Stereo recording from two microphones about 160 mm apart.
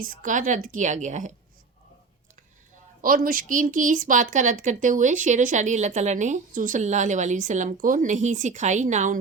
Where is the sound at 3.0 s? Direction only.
60° right (ahead or behind).